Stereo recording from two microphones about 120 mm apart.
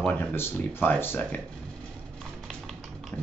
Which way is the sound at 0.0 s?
15° left (ahead or behind).